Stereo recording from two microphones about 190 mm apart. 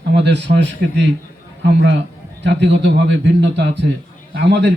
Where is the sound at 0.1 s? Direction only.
65° right (ahead or behind).